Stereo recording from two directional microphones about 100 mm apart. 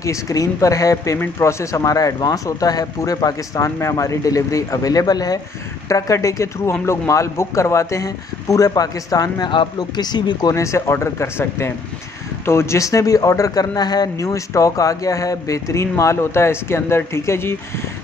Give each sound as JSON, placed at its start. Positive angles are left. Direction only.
{"t": 0.0, "sound": "speech", "side_deg": 35}
{"t": 9.5, "sound": "speech", "side_deg": 50}
{"t": 10.5, "sound": "speech", "side_deg": 30}